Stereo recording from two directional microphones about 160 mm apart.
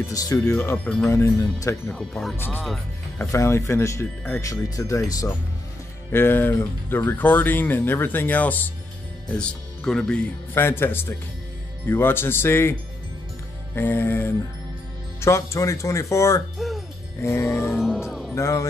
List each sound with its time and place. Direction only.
0.1 s speech: 20° left (ahead or behind)
0.6 s speech: 10° left (ahead or behind)
1.1 s speech: 20° left (ahead or behind)
1.9 s speech: 5° left (ahead or behind)
13.7 s speech: 15° left (ahead or behind)
16.5 s music: centre (ahead or behind)
17.2 s speech: 15° left (ahead or behind)
17.7 s speech: centre (ahead or behind)
18.3 s speech: 20° left (ahead or behind)